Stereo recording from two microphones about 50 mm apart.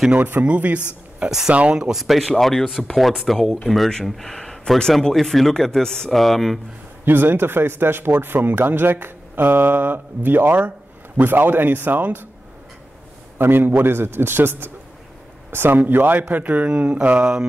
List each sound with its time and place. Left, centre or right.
0.4 s speech: right
1.2 s speech: centre
1.5 s speech: right
1.8 s speech: centre
7.1 s speech: right
13.4 s speech: right
17.2 s speech: centre